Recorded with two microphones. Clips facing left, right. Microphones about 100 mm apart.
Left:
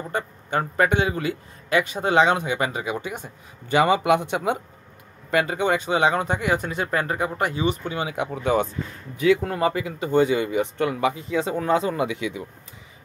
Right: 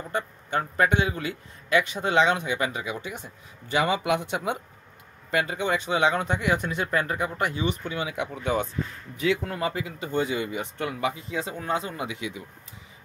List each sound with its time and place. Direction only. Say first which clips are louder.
0.1 s speech: left 2 dB; 50° left (ahead or behind)
5.9 s speech: left 3 dB; 40° left (ahead or behind)
10.1 s speech: left 7 dB; 60° left (ahead or behind); by 12.4 s 80° left